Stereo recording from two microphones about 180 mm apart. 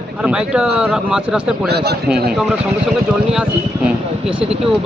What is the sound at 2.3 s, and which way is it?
Speech, centre (ahead or behind).